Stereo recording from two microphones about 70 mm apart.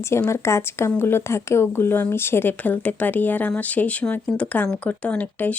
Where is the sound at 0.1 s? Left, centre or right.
Left.